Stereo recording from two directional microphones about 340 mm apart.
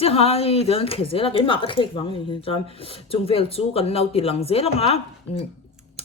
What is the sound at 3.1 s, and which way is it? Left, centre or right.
Speech, centre.